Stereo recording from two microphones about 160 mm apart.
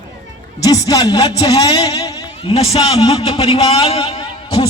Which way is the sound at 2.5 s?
40° left (ahead or behind).